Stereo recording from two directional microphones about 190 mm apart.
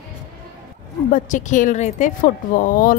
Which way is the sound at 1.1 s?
40° left (ahead or behind).